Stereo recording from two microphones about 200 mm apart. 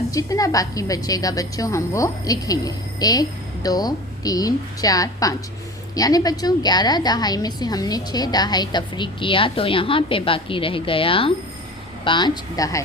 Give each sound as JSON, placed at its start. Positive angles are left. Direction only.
{"t": 0.1, "sound": "a woman's voice", "side_deg": 15}